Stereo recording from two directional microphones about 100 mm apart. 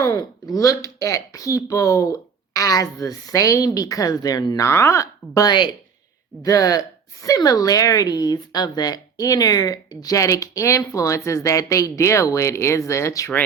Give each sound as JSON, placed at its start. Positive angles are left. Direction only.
{"t": 0.0, "sound": "a woman's voice", "side_deg": 40}